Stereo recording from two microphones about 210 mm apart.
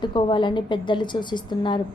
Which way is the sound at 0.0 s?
20° left (ahead or behind).